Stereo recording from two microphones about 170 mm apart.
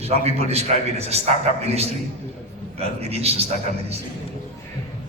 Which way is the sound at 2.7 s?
35° right (ahead or behind).